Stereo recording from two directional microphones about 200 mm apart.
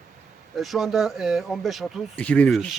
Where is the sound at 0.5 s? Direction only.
Centre (ahead or behind).